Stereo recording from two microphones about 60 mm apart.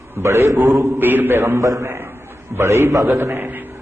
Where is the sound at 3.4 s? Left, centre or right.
Right.